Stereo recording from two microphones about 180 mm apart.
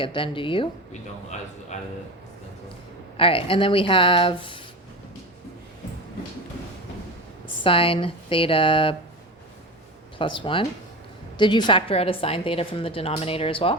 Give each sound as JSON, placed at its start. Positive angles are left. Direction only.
{"t": 0.0, "sound": "speech", "side_deg": 30}
{"t": 1.7, "sound": "a woman's voice", "side_deg": 40}
{"t": 3.2, "sound": "speech", "side_deg": 30}
{"t": 7.6, "sound": "speech", "side_deg": 30}
{"t": 10.2, "sound": "a woman's voice", "side_deg": 30}